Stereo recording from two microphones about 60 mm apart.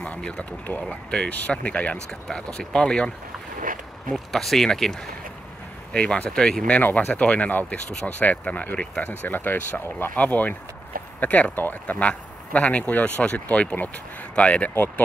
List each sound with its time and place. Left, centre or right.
0.0 s speech: centre
2.0 s speech: centre
4.1 s speech: centre
5.9 s speech: centre
6.8 s speech: left